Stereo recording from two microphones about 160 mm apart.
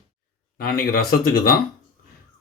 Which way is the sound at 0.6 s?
70° left (ahead or behind).